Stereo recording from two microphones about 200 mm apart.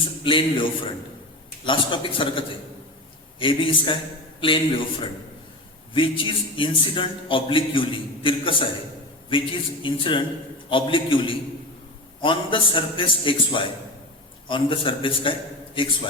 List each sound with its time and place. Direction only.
0.0 s a man's voice: 25° left (ahead or behind)